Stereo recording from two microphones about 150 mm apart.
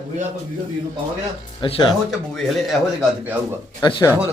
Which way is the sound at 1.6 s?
35° left (ahead or behind).